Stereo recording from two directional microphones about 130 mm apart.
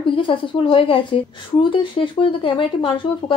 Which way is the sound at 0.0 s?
40° left (ahead or behind).